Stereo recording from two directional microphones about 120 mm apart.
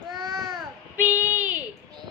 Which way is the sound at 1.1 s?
15° right (ahead or behind).